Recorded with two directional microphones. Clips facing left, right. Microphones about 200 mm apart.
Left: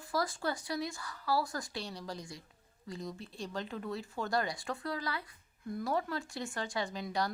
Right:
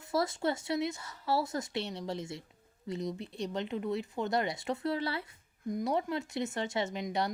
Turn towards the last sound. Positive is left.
turn(degrees=-20)  # may be behind; listen again after turning